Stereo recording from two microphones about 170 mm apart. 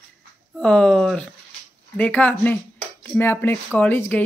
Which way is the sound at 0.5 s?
5° left (ahead or behind).